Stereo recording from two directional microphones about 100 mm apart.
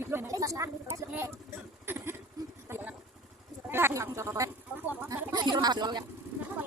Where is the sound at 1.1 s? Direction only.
25° right (ahead or behind).